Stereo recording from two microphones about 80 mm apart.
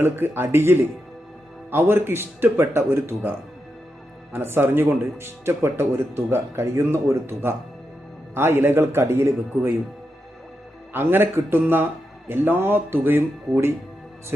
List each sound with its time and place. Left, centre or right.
0.0 s speech: right
10.9 s speech: right